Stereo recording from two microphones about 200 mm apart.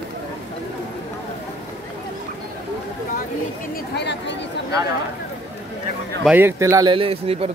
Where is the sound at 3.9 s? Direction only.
60° left (ahead or behind).